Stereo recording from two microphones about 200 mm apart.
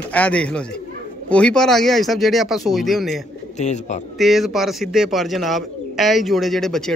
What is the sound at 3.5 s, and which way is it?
Speech, 35° left (ahead or behind).